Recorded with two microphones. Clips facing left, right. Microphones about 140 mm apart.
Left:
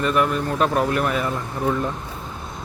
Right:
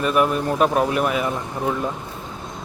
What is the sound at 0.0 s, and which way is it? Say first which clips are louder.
Speech: right 1 dB; 15° right (ahead or behind).